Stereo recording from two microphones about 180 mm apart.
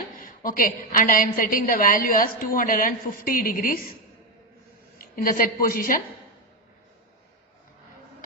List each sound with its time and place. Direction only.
0.2 s a woman's voice: 50° left (ahead or behind)
4.9 s a woman's voice: 50° left (ahead or behind)